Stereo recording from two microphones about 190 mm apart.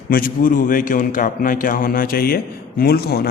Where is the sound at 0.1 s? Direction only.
50° left (ahead or behind).